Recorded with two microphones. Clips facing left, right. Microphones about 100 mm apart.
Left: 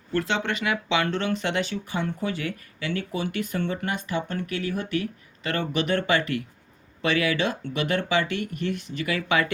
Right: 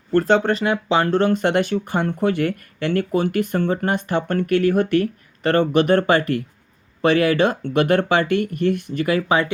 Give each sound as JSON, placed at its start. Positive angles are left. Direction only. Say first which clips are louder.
{"t": 0.1, "sound": "speech", "louder": "right 9 dB", "side_deg": -45}